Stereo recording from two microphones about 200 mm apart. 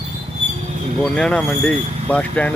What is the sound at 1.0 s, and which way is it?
Speech, 5° left (ahead or behind).